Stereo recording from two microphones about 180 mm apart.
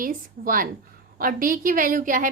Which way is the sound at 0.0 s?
50° right (ahead or behind).